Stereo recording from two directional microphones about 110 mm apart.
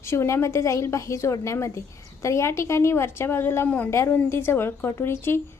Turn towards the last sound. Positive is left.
turn(degrees=20)  # may be behind; listen again after turning